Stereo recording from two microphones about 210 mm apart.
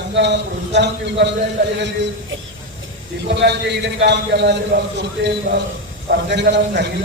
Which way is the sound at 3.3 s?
55° right (ahead or behind).